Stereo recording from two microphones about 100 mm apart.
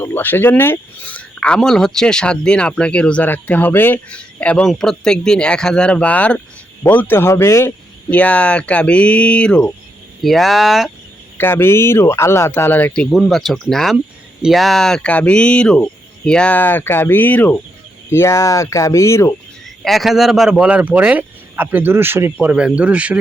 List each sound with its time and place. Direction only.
0.0 s speech: 20° left (ahead or behind)
8.1 s speech: 15° left (ahead or behind)
11.3 s speech: 25° left (ahead or behind)
13.1 s speech: centre (ahead or behind); by 19.3 s 30° left (ahead or behind)
19.8 s speech: centre (ahead or behind)